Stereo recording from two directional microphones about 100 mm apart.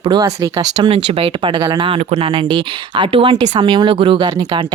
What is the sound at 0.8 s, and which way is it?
Speech, 65° right (ahead or behind).